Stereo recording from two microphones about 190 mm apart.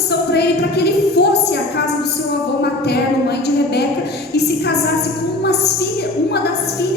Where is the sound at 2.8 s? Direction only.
60° left (ahead or behind).